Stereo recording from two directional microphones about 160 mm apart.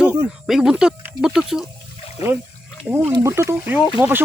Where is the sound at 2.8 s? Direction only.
15° right (ahead or behind).